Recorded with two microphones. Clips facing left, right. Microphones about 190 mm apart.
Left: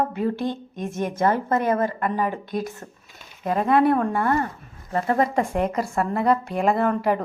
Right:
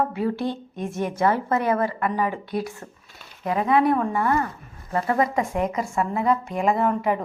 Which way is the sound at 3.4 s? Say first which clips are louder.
Left 1 dB; 50° left (ahead or behind).